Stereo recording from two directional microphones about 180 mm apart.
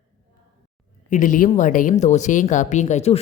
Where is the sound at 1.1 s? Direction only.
45° left (ahead or behind).